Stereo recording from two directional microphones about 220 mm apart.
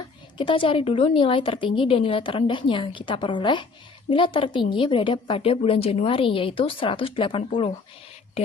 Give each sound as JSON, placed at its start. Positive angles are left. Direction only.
{"t": 0.3, "sound": "a woman's voice", "side_deg": 25}